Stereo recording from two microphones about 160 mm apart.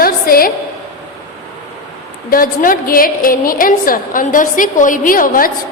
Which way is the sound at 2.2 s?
60° left (ahead or behind).